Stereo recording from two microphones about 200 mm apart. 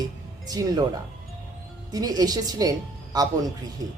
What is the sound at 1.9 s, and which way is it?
Speech, 20° right (ahead or behind).